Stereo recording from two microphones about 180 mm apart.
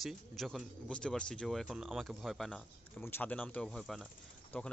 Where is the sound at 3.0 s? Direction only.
10° left (ahead or behind).